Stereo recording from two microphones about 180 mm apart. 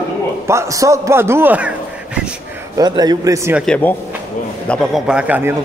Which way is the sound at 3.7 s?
10° left (ahead or behind).